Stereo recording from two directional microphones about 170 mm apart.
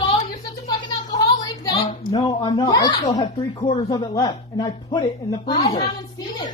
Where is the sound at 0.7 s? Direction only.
25° left (ahead or behind).